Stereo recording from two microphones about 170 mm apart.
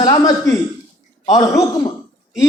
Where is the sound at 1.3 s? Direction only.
20° left (ahead or behind).